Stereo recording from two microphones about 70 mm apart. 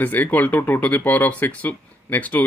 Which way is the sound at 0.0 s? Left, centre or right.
Left.